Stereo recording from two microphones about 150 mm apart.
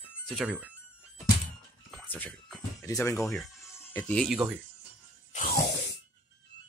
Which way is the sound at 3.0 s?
20° left (ahead or behind).